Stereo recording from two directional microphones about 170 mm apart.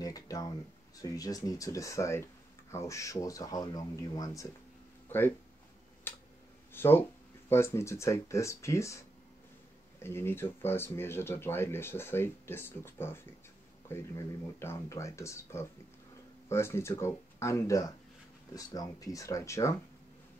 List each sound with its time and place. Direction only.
0.0 s speech: 20° left (ahead or behind)
6.1 s tick-tock: 10° left (ahead or behind)
6.7 s speech: 15° left (ahead or behind)